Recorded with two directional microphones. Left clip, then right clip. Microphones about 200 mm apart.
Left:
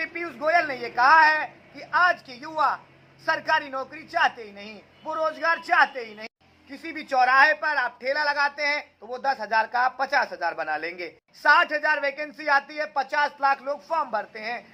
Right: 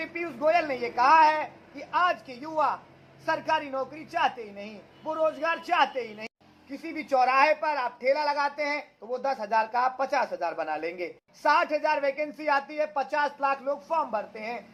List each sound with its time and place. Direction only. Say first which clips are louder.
0.3 s a man's voice: left 2 dB; 15° left (ahead or behind)